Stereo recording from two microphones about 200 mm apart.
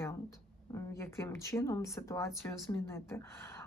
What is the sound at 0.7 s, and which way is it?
A woman's voice, 15° left (ahead or behind).